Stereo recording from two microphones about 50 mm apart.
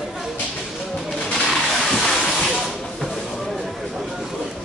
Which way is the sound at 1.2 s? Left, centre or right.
Centre.